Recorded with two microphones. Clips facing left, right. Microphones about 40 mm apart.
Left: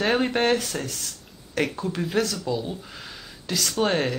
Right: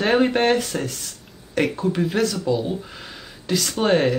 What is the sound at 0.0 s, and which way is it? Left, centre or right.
Speech, centre.